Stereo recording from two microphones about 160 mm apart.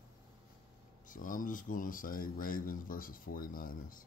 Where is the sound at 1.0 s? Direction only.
55° left (ahead or behind).